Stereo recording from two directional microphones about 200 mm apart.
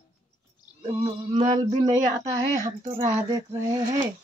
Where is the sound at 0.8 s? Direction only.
20° right (ahead or behind).